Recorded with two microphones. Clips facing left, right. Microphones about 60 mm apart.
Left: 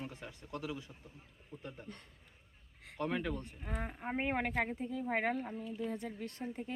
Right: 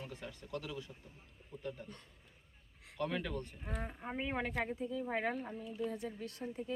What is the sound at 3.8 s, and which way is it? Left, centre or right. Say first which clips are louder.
A woman's voice: left 5 dB; left.